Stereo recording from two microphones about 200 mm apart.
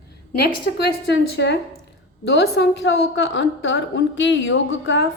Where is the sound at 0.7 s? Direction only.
55° left (ahead or behind).